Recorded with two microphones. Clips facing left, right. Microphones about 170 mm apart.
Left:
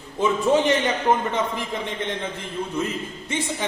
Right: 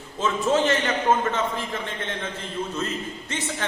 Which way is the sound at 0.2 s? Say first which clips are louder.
Left 3 dB; 15° left (ahead or behind).